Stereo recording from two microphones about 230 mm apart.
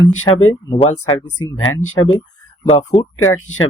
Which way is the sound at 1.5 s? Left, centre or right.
Left.